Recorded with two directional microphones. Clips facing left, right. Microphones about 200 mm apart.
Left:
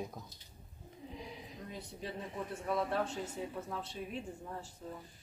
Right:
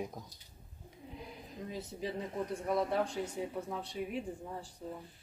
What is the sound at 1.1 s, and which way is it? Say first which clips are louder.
Sniff: even; centre (ahead or behind).